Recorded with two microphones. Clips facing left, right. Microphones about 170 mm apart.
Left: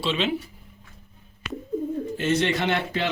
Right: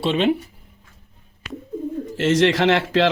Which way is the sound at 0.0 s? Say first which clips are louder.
Right 6 dB; 55° right (ahead or behind).